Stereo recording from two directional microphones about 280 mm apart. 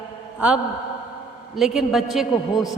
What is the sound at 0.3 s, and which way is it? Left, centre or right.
A man's voice, centre.